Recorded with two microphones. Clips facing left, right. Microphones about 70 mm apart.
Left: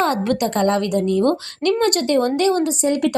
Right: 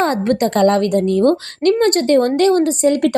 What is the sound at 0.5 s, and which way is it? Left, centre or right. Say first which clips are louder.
A woman's voice: right 6 dB; right.